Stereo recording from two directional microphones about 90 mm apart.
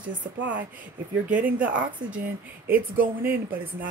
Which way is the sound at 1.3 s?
15° right (ahead or behind).